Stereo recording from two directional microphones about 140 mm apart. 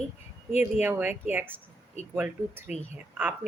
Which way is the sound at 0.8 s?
15° right (ahead or behind).